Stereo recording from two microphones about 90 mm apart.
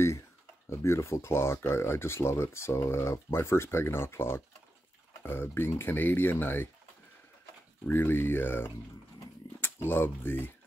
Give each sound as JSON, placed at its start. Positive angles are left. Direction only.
{"t": 0.7, "sound": "speech", "side_deg": 30}
{"t": 7.8, "sound": "speech", "side_deg": 25}